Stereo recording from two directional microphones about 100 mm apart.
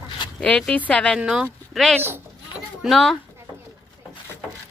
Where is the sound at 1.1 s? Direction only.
5° right (ahead or behind).